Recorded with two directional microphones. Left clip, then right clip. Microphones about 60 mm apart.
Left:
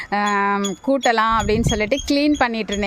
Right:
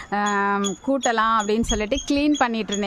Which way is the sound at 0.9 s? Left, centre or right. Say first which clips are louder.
Left 3 dB; left.